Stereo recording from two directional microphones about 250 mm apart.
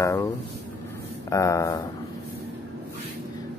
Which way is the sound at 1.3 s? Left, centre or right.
Centre.